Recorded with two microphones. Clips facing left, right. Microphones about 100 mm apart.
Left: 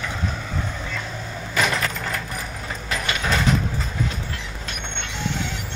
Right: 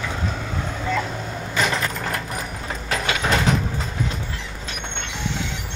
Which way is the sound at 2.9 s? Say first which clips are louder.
Right 2 dB; 20° right (ahead or behind).